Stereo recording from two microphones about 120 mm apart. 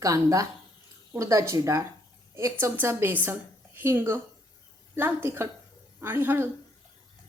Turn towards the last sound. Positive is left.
turn(degrees=-20)  # may be behind; listen again after turning